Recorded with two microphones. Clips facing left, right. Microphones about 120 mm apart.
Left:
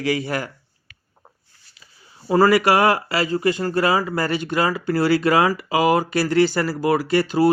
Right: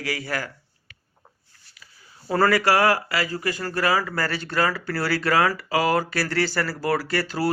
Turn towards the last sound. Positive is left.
turn(degrees=20)  # may be behind; listen again after turning